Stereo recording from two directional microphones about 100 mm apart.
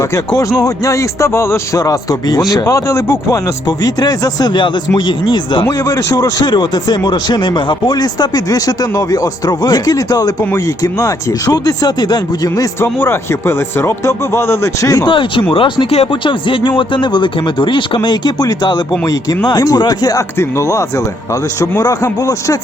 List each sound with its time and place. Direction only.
0.0 s speech: 35° left (ahead or behind)
3.7 s a man's voice: 40° left (ahead or behind)
5.6 s speech: 30° left (ahead or behind)
6.4 s speech: 50° left (ahead or behind)
12.8 s speech: 25° left (ahead or behind)
15.0 s a man's voice: 60° left (ahead or behind); by 22.5 s 35° left (ahead or behind)